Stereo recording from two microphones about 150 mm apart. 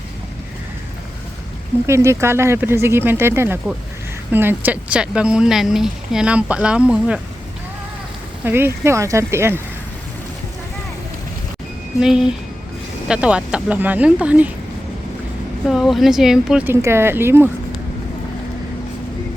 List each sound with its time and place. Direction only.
1.9 s speech: 20° right (ahead or behind)
8.4 s speech: 15° right (ahead or behind)
11.9 s speech: 5° right (ahead or behind)
15.6 s speech: centre (ahead or behind)
16.8 s speech: 15° right (ahead or behind)